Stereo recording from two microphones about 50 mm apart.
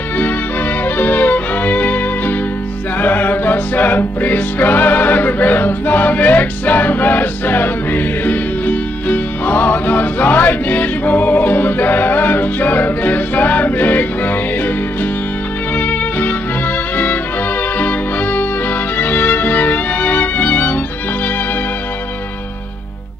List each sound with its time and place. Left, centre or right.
0.8 s music: left
15.7 s music: left